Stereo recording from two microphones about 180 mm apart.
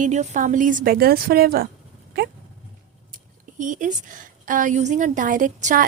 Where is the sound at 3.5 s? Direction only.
45° right (ahead or behind).